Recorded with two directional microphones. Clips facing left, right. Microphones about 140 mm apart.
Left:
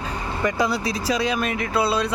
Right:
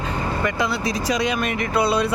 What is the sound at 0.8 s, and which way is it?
Speech, 5° left (ahead or behind).